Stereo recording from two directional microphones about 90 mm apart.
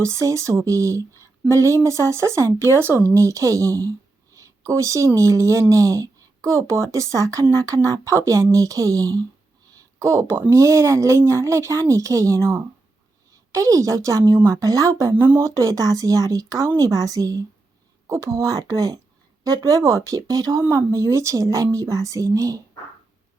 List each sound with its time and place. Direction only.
0.0 s speech: 35° right (ahead or behind)
9.7 s a sound: 30° right (ahead or behind)
10.5 s speech: 35° right (ahead or behind)
15.1 s speech: 20° right (ahead or behind)
15.4 s speech: 35° right (ahead or behind)